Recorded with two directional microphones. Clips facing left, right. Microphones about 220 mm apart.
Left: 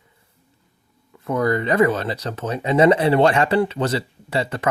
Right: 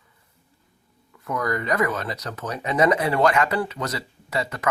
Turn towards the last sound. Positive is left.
turn(degrees=30)  # may be behind; listen again after turning